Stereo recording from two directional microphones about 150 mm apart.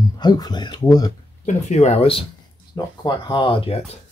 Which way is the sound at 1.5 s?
50° left (ahead or behind).